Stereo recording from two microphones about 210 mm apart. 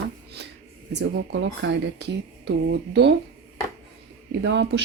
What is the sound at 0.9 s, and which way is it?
Speech, 55° right (ahead or behind).